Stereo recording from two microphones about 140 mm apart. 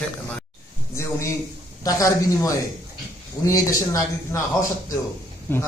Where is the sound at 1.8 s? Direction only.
25° left (ahead or behind).